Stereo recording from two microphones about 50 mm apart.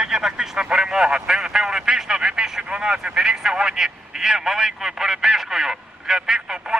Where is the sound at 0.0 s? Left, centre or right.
Centre.